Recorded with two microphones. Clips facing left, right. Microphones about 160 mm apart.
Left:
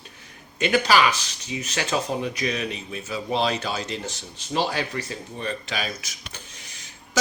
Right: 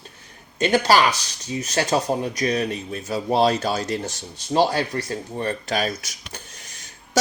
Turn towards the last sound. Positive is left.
turn(degrees=-45)  # may be behind; listen again after turning